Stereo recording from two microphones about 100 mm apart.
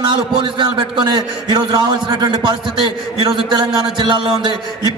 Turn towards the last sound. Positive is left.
turn(degrees=-50)  # may be behind; listen again after turning